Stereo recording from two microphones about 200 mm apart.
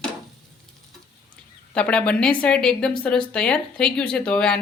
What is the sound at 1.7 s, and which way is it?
Speech, 5° left (ahead or behind).